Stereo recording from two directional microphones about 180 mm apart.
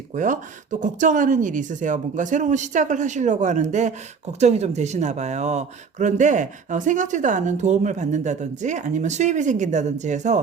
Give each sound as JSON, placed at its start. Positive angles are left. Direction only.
{"t": 0.1, "sound": "speech", "side_deg": -45}